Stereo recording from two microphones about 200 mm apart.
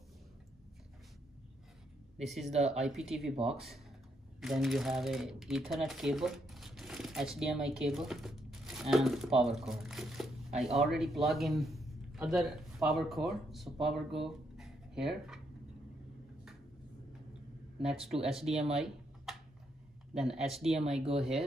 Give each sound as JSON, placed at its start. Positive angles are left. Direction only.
{"t": 2.1, "sound": "speech", "side_deg": 0}
{"t": 17.8, "sound": "speech", "side_deg": 0}
{"t": 20.4, "sound": "speech", "side_deg": 0}